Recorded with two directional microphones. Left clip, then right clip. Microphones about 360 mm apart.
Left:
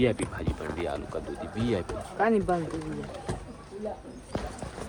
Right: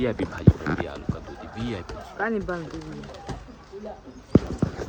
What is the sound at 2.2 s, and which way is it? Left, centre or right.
Speech, centre.